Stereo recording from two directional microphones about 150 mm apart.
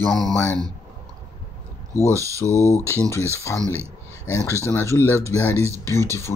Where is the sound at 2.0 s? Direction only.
20° right (ahead or behind).